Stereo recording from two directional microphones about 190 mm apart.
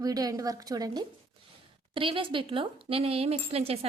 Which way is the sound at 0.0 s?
20° right (ahead or behind).